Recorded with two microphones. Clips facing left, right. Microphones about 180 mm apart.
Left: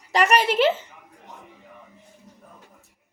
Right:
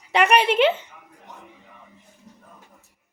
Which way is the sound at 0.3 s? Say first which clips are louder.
Right 2 dB; 40° left (ahead or behind).